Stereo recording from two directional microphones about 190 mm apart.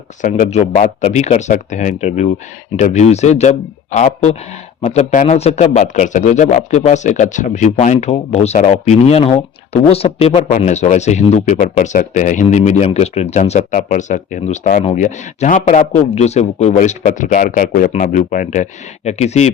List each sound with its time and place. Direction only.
0.2 s speech: 40° left (ahead or behind)